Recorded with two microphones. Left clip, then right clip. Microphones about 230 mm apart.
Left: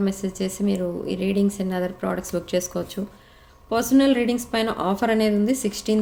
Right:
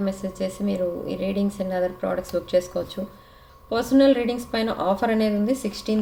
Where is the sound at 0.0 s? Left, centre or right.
Left.